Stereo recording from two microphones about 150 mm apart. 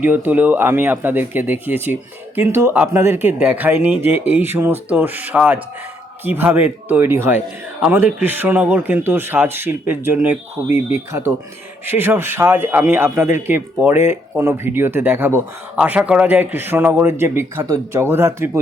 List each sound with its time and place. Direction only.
0.0 s a man's voice: 10° right (ahead or behind)